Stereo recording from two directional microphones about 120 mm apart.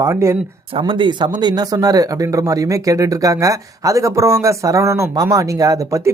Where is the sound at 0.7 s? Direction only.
45° right (ahead or behind); by 6.1 s 25° right (ahead or behind).